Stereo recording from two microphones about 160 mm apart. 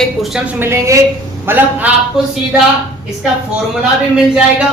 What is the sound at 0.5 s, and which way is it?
A woman's voice, 15° right (ahead or behind).